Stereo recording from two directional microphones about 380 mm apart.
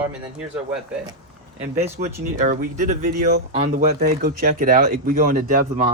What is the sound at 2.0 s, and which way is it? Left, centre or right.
Speech, right.